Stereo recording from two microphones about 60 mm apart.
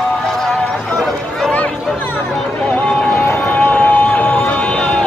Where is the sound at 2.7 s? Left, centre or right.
Left.